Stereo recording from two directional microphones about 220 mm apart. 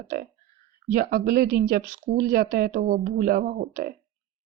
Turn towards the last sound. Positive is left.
turn(degrees=-40)  # may be behind; listen again after turning